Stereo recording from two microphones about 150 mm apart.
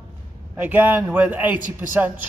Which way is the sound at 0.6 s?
10° right (ahead or behind).